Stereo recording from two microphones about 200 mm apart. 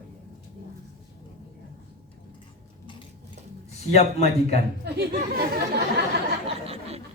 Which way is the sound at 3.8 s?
30° left (ahead or behind).